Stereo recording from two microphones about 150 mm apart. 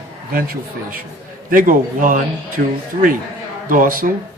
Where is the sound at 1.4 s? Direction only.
65° right (ahead or behind).